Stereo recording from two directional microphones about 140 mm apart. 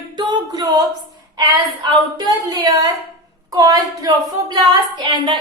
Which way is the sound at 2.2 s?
25° right (ahead or behind).